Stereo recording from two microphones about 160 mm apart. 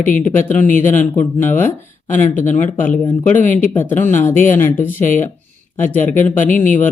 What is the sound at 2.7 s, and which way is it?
Speech, 15° left (ahead or behind).